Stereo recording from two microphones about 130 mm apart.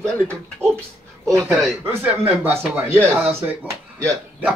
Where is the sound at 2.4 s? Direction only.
15° right (ahead or behind).